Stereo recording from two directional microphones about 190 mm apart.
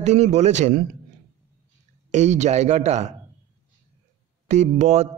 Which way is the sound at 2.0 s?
40° right (ahead or behind).